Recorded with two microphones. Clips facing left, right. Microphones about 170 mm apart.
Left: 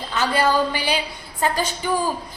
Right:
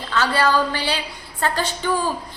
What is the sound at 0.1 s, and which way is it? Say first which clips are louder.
A woman's voice: right 1 dB; 15° left (ahead or behind).